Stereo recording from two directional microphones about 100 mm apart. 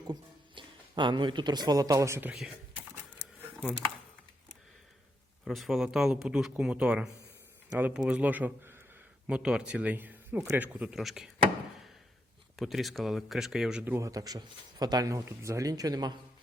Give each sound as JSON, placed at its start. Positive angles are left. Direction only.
{"t": 0.1, "sound": "speech", "side_deg": -50}
{"t": 5.5, "sound": "speech", "side_deg": 0}
{"t": 9.2, "sound": "speech", "side_deg": -10}
{"t": 10.8, "sound": "speech", "side_deg": -5}
{"t": 12.5, "sound": "speech", "side_deg": 0}
{"t": 13.8, "sound": "a man's voice", "side_deg": -30}